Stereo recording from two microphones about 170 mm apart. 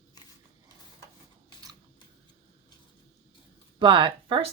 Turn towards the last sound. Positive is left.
turn(degrees=-30)  # may be behind; listen again after turning